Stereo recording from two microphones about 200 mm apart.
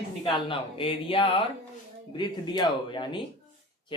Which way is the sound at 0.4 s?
25° left (ahead or behind).